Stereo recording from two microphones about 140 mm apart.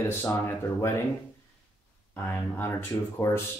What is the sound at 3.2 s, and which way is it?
Speech, 20° left (ahead or behind).